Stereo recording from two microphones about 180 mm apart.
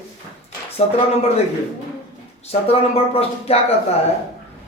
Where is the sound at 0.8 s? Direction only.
35° left (ahead or behind).